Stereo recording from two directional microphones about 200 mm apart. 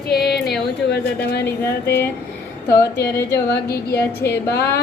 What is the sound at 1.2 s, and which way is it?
Speech, 55° left (ahead or behind).